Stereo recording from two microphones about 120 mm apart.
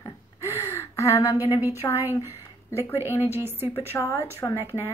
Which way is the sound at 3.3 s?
20° right (ahead or behind).